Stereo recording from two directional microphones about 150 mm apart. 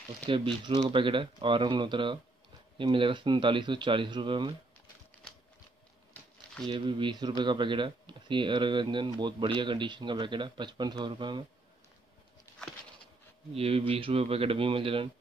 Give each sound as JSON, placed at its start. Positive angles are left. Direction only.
{"t": 0.3, "sound": "speech", "side_deg": -35}
{"t": 6.7, "sound": "speech", "side_deg": -30}
{"t": 13.6, "sound": "speech", "side_deg": -40}